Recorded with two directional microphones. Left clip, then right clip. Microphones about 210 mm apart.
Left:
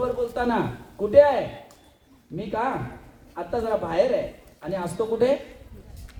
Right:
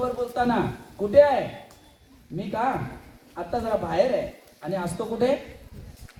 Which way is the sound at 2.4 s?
20° left (ahead or behind).